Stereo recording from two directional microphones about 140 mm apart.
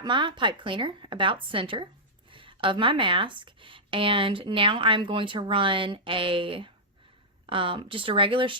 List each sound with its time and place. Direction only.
0.0 s speech: 35° right (ahead or behind)